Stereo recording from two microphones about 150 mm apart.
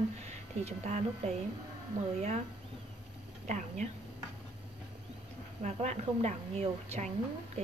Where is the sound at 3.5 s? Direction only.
55° right (ahead or behind).